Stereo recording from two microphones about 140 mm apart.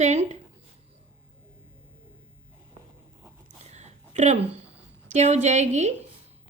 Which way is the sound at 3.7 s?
55° right (ahead or behind).